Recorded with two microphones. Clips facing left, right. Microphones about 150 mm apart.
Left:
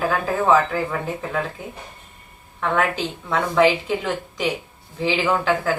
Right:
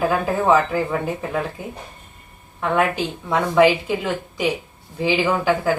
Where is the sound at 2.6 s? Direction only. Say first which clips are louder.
Right 2 dB; 15° right (ahead or behind).